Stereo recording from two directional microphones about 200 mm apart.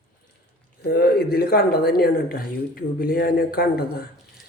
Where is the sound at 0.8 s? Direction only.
50° left (ahead or behind).